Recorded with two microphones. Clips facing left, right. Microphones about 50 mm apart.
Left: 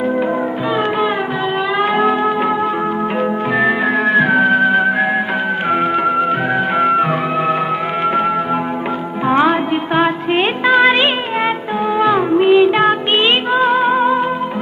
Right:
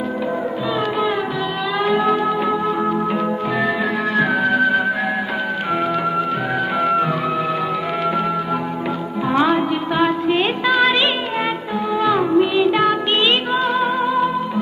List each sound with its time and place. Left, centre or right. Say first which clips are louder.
0.8 s music: left 3 dB; left